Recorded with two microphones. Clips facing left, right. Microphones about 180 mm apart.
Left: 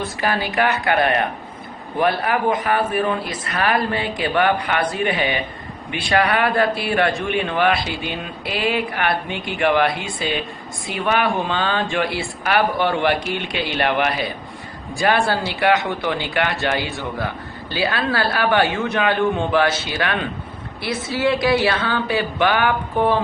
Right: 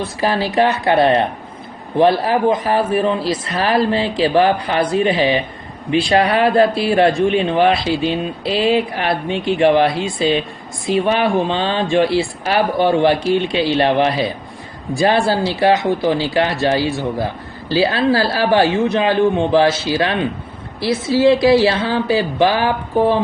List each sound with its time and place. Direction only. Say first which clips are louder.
0.2 s a man's voice: right 5 dB; 30° right (ahead or behind)